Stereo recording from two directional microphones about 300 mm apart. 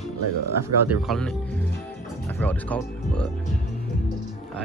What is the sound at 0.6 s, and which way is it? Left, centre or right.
Speech, right.